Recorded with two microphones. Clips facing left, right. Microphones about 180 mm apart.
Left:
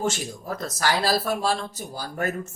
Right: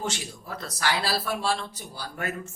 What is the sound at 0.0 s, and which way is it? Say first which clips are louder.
Speech: left 6 dB; 45° left (ahead or behind).